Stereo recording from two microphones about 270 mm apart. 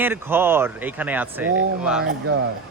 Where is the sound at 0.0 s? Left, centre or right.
Centre.